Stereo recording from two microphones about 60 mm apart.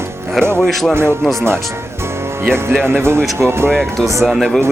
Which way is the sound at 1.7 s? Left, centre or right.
Right.